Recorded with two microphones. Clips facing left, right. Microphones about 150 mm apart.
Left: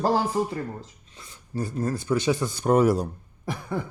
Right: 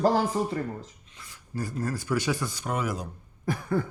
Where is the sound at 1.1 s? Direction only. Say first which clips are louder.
Left 3 dB; 30° left (ahead or behind).